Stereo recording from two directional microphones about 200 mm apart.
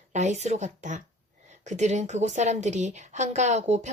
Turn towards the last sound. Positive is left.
turn(degrees=-35)  # may be behind; listen again after turning